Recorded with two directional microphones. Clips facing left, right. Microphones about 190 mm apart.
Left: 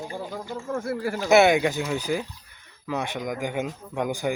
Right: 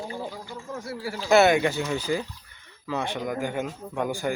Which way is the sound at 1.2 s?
15° left (ahead or behind).